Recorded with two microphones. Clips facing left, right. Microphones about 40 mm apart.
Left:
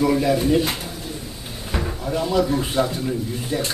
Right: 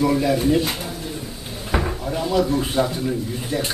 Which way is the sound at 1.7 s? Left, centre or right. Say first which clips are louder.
Right 4 dB; centre.